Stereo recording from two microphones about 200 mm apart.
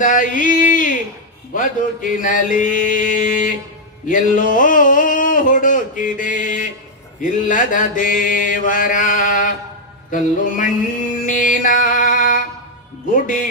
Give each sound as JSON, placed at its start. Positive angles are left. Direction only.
{"t": 0.0, "sound": "mantra", "side_deg": 40}
{"t": 4.1, "sound": "a sound", "side_deg": 40}
{"t": 7.2, "sound": "mantra", "side_deg": 40}
{"t": 10.1, "sound": "music", "side_deg": 40}